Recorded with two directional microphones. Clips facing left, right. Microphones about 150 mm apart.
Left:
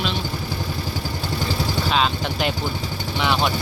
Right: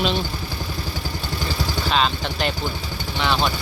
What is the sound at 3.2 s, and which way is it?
Speech, 10° left (ahead or behind).